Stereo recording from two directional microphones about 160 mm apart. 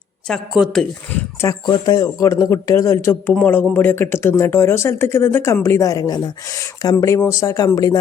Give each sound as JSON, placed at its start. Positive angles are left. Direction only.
{"t": 0.3, "sound": "speech", "side_deg": 0}
{"t": 1.6, "sound": "speech", "side_deg": 25}